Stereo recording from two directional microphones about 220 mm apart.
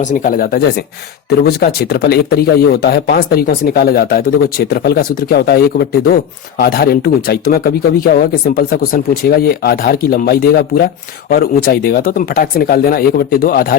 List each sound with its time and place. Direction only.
0.0 s speech: 35° left (ahead or behind)